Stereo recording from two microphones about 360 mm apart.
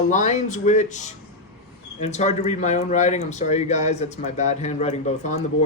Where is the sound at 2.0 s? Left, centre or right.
Centre.